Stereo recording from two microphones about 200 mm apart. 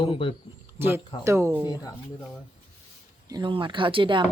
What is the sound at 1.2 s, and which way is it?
Speech, 15° right (ahead or behind).